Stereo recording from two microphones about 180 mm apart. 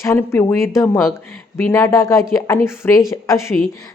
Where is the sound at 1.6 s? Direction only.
15° left (ahead or behind).